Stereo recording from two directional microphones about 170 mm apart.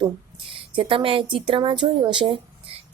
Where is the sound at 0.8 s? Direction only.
30° right (ahead or behind).